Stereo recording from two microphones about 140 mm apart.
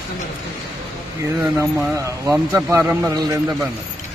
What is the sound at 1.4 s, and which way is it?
Speech, 20° right (ahead or behind).